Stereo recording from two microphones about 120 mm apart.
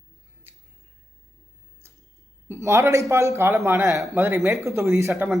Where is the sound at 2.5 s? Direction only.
20° right (ahead or behind).